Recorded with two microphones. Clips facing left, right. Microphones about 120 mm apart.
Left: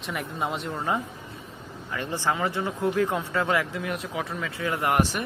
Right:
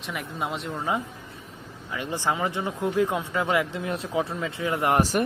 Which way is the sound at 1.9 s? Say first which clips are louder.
Even; 15° right (ahead or behind).